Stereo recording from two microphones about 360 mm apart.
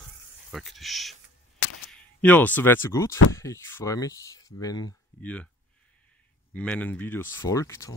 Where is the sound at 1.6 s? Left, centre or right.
Left.